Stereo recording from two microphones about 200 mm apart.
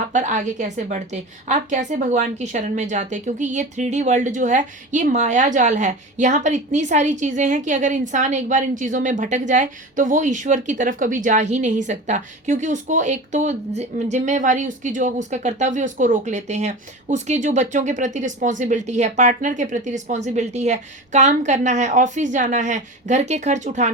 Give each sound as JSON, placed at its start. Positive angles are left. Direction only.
{"t": 0.1, "sound": "a woman's voice", "side_deg": -40}